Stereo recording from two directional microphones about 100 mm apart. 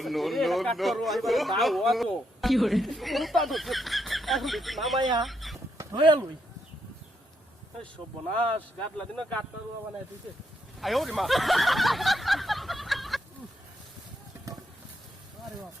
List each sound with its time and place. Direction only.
0.0 s speech: centre (ahead or behind)
4.9 s speech: 45° right (ahead or behind)
5.2 s speech: centre (ahead or behind)
5.7 s a sound: 30° right (ahead or behind)
9.0 s speech: 10° left (ahead or behind)
10.8 s a sound: centre (ahead or behind)